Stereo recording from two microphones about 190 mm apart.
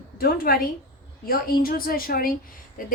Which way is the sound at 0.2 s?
55° left (ahead or behind).